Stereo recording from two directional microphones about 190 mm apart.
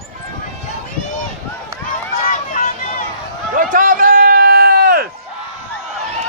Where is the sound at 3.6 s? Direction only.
45° right (ahead or behind).